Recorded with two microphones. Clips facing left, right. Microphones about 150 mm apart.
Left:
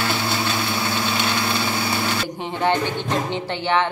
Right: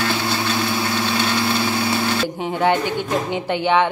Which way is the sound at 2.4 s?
10° right (ahead or behind).